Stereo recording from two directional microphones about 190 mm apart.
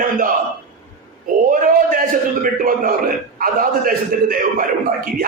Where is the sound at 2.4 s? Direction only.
45° right (ahead or behind).